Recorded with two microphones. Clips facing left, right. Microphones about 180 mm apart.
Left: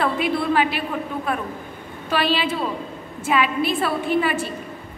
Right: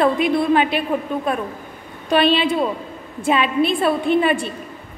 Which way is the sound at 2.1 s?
25° right (ahead or behind).